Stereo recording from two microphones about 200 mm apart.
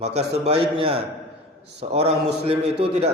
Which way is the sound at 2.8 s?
30° right (ahead or behind).